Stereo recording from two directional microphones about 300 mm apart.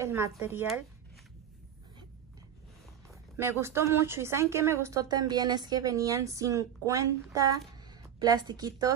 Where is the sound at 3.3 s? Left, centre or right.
Centre.